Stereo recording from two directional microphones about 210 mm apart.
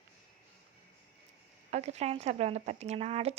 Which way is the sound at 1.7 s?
30° right (ahead or behind).